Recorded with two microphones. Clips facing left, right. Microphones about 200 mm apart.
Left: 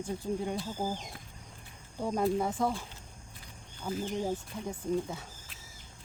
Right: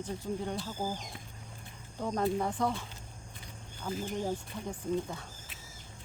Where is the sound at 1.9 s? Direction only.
10° left (ahead or behind).